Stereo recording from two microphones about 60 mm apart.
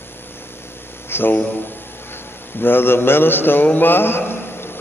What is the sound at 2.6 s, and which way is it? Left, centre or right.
A man's voice, left.